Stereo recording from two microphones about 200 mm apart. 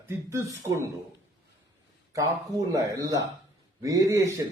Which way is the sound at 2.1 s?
15° right (ahead or behind).